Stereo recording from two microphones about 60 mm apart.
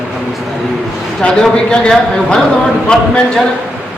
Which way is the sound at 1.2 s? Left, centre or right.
Centre.